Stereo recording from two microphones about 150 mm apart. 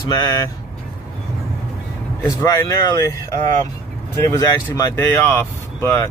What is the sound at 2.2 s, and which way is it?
Speech, 25° left (ahead or behind).